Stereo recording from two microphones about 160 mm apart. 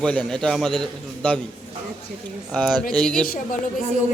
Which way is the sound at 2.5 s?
10° left (ahead or behind).